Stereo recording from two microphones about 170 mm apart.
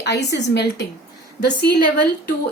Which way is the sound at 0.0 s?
85° left.